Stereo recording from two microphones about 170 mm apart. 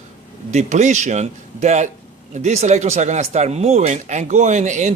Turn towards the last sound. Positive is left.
turn(degrees=-45)  # may be behind; listen again after turning